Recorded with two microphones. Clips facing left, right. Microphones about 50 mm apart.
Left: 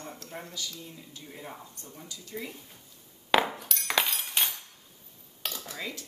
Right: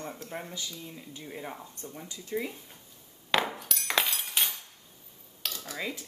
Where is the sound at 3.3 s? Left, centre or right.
Centre.